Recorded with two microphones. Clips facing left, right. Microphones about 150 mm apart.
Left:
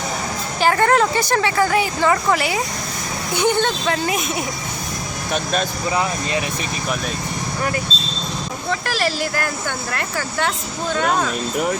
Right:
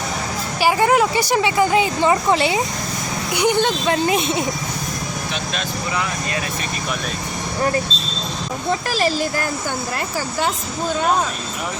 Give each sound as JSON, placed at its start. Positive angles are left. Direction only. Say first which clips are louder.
{"t": 0.6, "sound": "a woman's voice", "louder": "even", "side_deg": -10}
{"t": 9.9, "sound": "a woman's voice", "louder": "right 1 dB", "side_deg": -15}